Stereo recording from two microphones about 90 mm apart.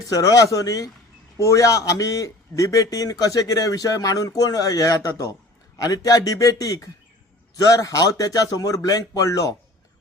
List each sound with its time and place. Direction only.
0.1 s a man's voice: 40° left (ahead or behind)